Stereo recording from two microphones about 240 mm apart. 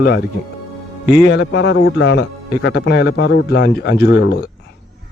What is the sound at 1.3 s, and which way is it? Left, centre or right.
Speech, left.